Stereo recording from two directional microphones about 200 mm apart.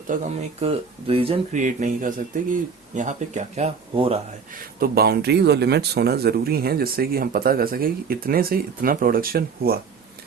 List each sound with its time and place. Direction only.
0.1 s speech: 40° right (ahead or behind)
0.6 s speech: 30° right (ahead or behind)
4.8 s speech: 50° right (ahead or behind)